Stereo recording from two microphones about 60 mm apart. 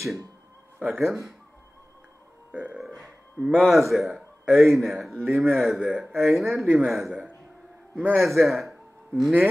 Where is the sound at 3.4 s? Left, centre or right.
Right.